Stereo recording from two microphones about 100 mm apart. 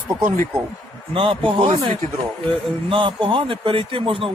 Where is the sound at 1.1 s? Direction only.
60° right (ahead or behind).